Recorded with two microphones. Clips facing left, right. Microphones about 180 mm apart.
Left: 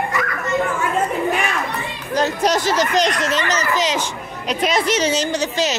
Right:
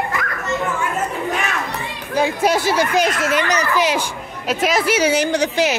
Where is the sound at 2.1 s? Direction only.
10° right (ahead or behind).